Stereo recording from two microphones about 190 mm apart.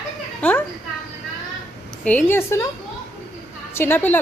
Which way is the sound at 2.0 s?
10° left (ahead or behind).